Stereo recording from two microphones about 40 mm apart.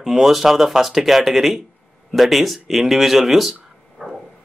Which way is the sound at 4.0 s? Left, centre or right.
Left.